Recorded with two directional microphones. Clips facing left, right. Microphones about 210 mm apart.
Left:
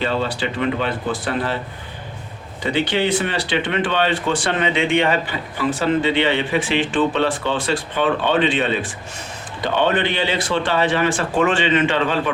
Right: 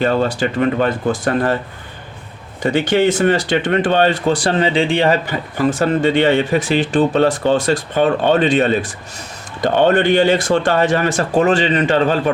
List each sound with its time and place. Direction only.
0.0 s speech: 45° right (ahead or behind)
2.6 s speech: 45° right (ahead or behind)